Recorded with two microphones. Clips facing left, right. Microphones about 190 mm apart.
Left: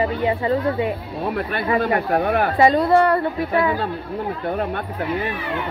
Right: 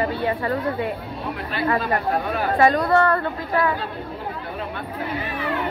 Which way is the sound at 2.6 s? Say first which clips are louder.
Left 2 dB; 25° left (ahead or behind).